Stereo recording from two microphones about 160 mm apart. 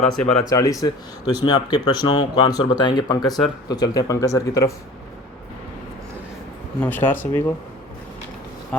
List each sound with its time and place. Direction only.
0.1 s speech: 5° left (ahead or behind)
0.5 s speech: 20° left (ahead or behind)
6.8 s speech: 10° left (ahead or behind)